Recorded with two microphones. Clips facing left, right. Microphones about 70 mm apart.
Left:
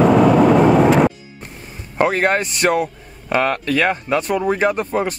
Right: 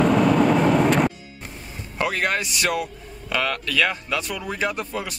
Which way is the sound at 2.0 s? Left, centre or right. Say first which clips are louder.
Left 7 dB; left.